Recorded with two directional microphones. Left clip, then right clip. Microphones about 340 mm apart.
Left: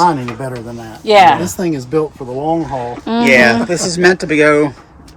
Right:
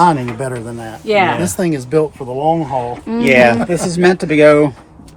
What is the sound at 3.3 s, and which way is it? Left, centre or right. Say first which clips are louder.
Speech: even; right.